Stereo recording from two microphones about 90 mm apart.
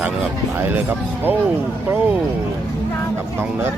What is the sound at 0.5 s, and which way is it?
Speech, 20° right (ahead or behind).